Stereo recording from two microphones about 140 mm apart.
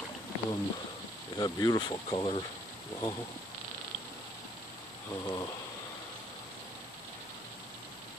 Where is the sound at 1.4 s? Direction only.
30° left (ahead or behind).